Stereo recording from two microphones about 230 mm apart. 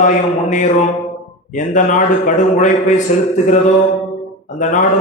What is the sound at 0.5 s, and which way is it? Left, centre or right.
A man's voice, left.